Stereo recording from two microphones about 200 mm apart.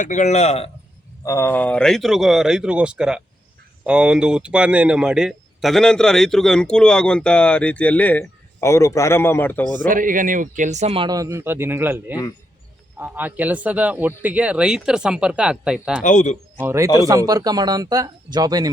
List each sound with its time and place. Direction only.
0.0 s a man's voice: 40° left (ahead or behind)
1.2 s speech: 15° left (ahead or behind)
9.8 s speech: 40° right (ahead or behind); by 16.0 s 5° right (ahead or behind)
16.0 s a man's voice: 35° left (ahead or behind)
16.6 s speech: 10° right (ahead or behind)